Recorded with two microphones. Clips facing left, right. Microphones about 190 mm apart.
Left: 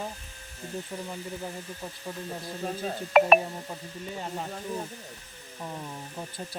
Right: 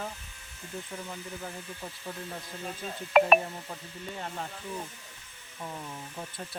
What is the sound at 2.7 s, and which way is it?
Speech, 40° left (ahead or behind).